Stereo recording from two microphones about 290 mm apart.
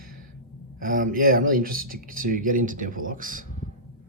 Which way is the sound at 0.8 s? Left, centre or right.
Right.